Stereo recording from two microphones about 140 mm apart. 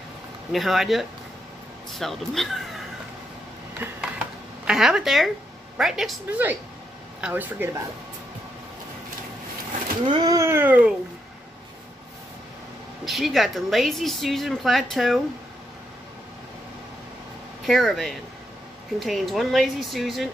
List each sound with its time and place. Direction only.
0.5 s a woman's voice: centre (ahead or behind)
4.6 s a woman's voice: 5° right (ahead or behind)
7.2 s cat: 10° right (ahead or behind)
10.0 s speech: 35° right (ahead or behind)
10.3 s cat: 20° right (ahead or behind)
13.0 s a woman's voice: centre (ahead or behind)
17.6 s a woman's voice: centre (ahead or behind)